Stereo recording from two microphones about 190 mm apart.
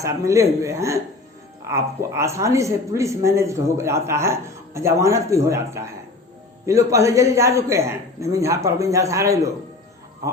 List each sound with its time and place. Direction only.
0.0 s speech: 15° right (ahead or behind)